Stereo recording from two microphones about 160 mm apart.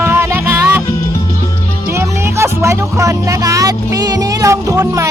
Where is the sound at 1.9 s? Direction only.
15° right (ahead or behind).